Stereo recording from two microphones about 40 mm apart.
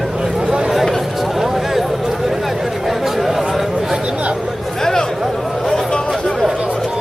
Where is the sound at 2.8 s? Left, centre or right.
Centre.